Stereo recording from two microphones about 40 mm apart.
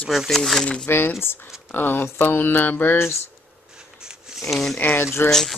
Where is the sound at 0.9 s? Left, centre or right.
Left.